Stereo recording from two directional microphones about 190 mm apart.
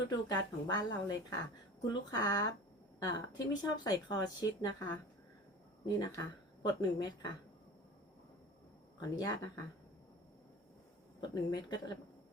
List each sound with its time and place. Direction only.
0.0 s speech: 20° left (ahead or behind)
6.0 s speech: 20° left (ahead or behind)
9.0 s speech: 20° left (ahead or behind)
11.2 s speech: 20° left (ahead or behind)